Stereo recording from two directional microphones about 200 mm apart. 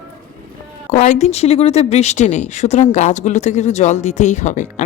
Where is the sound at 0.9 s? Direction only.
35° left (ahead or behind).